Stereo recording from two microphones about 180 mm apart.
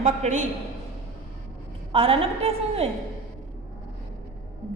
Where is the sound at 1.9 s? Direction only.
30° right (ahead or behind).